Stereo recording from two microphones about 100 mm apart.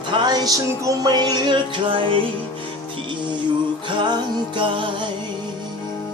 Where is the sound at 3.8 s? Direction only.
50° right (ahead or behind).